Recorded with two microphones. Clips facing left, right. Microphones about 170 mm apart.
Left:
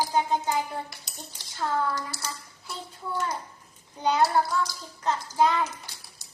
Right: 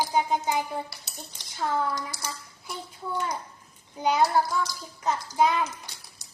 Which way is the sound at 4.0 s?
15° right (ahead or behind).